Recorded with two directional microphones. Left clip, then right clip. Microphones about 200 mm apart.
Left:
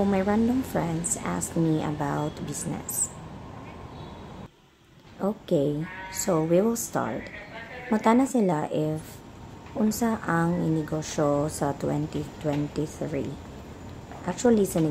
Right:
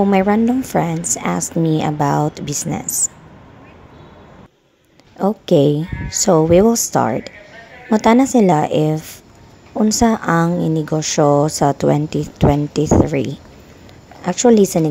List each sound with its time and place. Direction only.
0.0 s speech: 45° right (ahead or behind)
5.2 s speech: 45° right (ahead or behind)